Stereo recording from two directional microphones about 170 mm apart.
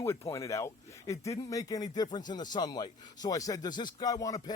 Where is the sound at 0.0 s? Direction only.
15° left (ahead or behind).